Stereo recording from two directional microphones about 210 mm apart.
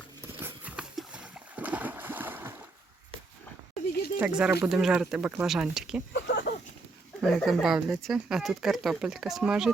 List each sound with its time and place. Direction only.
0.3 s splash: 10° right (ahead or behind)
4.2 s speech: 5° right (ahead or behind)
6.1 s a sound: 55° left (ahead or behind)
7.2 s speech: centre (ahead or behind)